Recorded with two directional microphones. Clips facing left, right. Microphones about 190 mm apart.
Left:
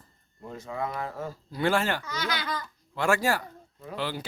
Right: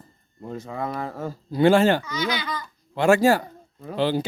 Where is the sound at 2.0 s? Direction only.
Centre (ahead or behind).